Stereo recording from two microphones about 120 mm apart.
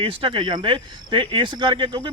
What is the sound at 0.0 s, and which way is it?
Speech, 45° right (ahead or behind).